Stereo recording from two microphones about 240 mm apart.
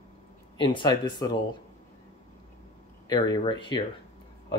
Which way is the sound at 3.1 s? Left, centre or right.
Centre.